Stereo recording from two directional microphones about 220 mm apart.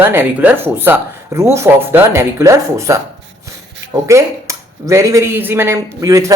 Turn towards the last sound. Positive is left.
turn(degrees=-15)  # may be behind; listen again after turning